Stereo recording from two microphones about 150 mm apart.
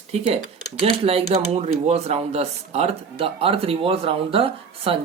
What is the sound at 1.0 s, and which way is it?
Speech, 45° right (ahead or behind).